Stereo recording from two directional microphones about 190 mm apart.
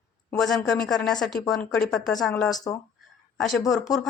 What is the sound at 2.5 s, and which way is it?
Speech, 20° left (ahead or behind).